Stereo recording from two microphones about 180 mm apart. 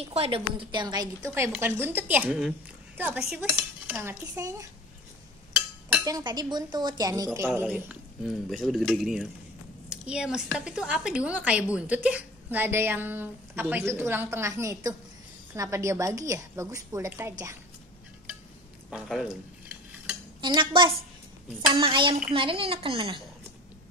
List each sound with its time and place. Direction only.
0.0 s a woman's voice: 35° right (ahead or behind); by 4.6 s 15° right (ahead or behind)
6.0 s a woman's voice: 20° right (ahead or behind)
18.9 s speech: 5° right (ahead or behind)
20.3 s speech: 25° right (ahead or behind)